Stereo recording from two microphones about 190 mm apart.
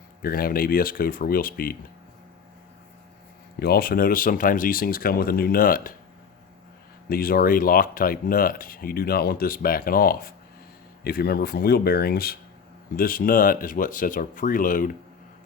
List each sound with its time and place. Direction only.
0.2 s speech: 50° left (ahead or behind)
3.6 s speech: 55° left (ahead or behind)
7.1 s speech: 50° left (ahead or behind)